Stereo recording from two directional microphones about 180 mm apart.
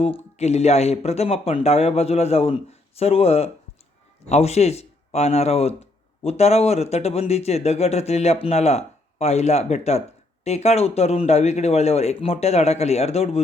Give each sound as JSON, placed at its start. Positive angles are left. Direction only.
{"t": 0.0, "sound": "speech", "side_deg": 35}